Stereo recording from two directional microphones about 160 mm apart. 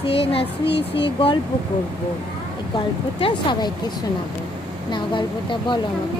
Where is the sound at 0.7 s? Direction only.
90° left.